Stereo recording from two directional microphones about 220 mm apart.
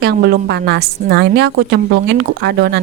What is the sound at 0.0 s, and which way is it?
A woman's voice, 45° right (ahead or behind).